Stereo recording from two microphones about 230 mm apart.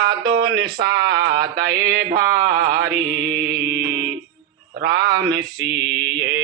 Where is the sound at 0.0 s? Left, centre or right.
Right.